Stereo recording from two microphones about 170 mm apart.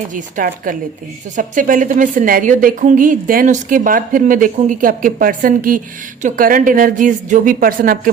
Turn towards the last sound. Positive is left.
turn(degrees=-55)  # may be behind; listen again after turning